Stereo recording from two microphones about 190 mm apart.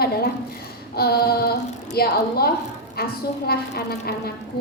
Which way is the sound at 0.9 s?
55° left (ahead or behind).